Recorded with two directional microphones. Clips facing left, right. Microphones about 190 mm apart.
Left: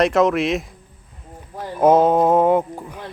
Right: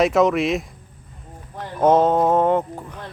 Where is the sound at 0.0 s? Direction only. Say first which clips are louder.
Even; centre (ahead or behind).